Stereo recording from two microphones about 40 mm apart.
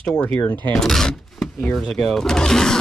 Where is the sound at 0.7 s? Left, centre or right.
Centre.